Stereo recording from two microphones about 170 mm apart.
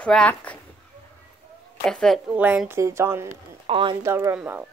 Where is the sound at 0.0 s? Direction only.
5° left (ahead or behind).